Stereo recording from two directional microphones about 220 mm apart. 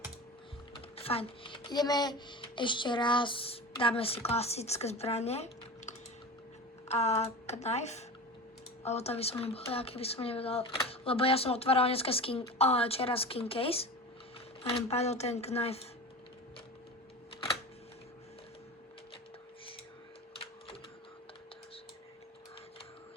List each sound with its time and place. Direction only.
0.9 s speech: 25° left (ahead or behind)